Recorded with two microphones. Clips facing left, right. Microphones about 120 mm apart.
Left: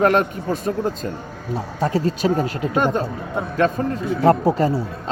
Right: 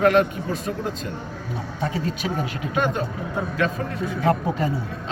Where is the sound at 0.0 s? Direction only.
45° left (ahead or behind).